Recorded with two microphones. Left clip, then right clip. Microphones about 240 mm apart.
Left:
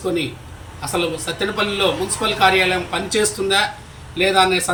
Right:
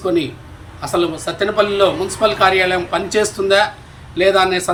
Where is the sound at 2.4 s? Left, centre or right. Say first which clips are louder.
Left 1 dB; centre.